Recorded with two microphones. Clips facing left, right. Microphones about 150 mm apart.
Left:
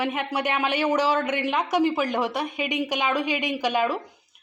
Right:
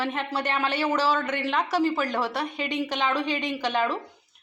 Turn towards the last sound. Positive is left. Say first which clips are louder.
# left 2 dB
turn(degrees=10)  # may be behind; listen again after turning